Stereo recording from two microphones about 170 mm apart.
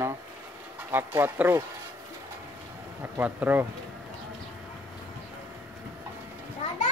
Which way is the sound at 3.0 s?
10° right (ahead or behind).